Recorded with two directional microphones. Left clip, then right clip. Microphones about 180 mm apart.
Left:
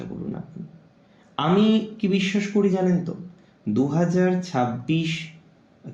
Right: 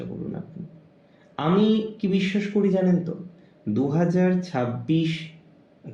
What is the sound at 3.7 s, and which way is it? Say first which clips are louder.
Speech: left 1 dB; 25° left (ahead or behind).